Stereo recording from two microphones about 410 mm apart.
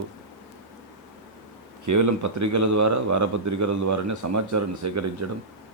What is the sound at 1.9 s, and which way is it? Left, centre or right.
Speech, right.